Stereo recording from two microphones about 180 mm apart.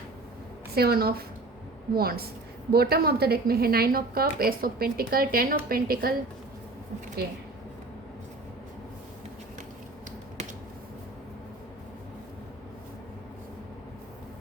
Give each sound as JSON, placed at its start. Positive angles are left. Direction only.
{"t": 0.8, "sound": "a woman's voice", "side_deg": -55}